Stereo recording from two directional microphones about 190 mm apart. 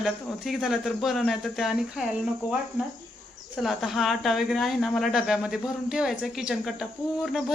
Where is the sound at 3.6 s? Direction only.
Centre (ahead or behind).